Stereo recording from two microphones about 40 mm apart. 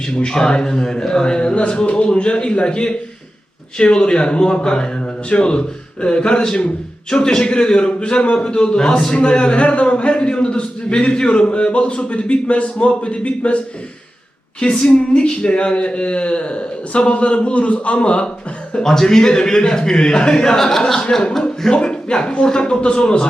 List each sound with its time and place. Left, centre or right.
0.0 s a man's voice: left
14.6 s a man's voice: left
18.8 s a man's voice: centre